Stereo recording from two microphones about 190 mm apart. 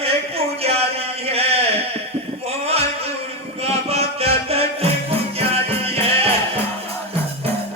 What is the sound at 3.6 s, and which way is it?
Music, 30° right (ahead or behind).